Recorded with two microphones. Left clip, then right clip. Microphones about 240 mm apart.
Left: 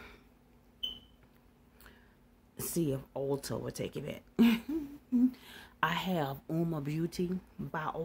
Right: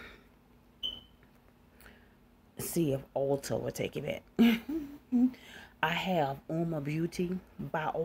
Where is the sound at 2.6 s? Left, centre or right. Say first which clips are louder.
Right 3 dB; centre.